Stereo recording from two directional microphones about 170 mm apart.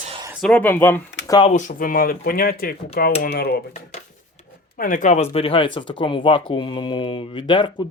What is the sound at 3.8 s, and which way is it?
Speech, 40° left (ahead or behind).